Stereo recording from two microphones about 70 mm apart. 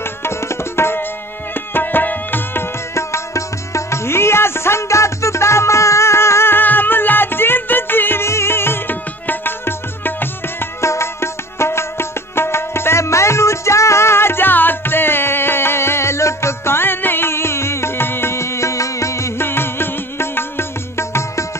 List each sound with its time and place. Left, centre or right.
0.2 s tabla: left
2.9 s music: left
10.6 s music: left